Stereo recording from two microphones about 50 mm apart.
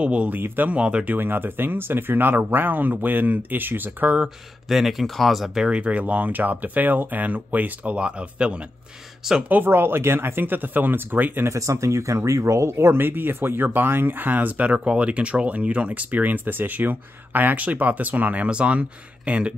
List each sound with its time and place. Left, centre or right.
0.0 s speech: right
1.1 s speech: right
4.6 s speech: centre
5.6 s speech: right
9.5 s speech: right
11.4 s speech: right
14.7 s speech: right